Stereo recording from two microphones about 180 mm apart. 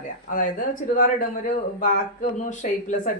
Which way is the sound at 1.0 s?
45° left (ahead or behind).